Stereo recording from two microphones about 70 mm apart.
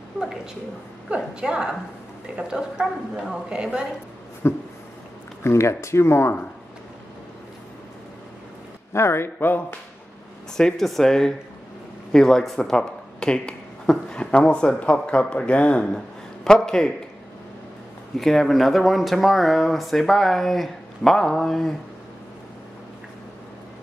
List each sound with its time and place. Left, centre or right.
1.0 s speech: centre
4.4 s speech: left
8.9 s speech: left
10.6 s speech: centre
18.1 s speech: centre